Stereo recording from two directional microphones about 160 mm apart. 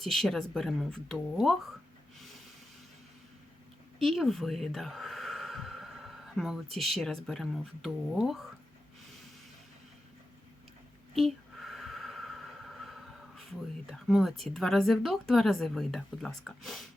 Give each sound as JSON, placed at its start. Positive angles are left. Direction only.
{"t": 0.0, "sound": "speech", "side_deg": 0}
{"t": 4.0, "sound": "speech", "side_deg": 0}
{"t": 11.1, "sound": "a sound", "side_deg": 0}
{"t": 13.9, "sound": "speech", "side_deg": 0}